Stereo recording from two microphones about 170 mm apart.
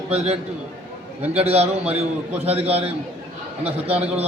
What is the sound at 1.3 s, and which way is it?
A man's voice, 40° right (ahead or behind).